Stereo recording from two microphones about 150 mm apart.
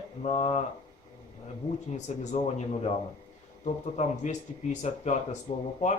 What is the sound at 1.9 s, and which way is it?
Speech, 50° left (ahead or behind).